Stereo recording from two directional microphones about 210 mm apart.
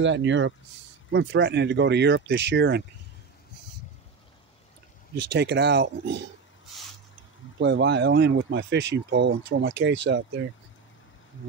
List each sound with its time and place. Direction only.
0.0 s speech: 60° right (ahead or behind)
5.3 s speech: 55° right (ahead or behind)
7.5 s speech: 55° right (ahead or behind)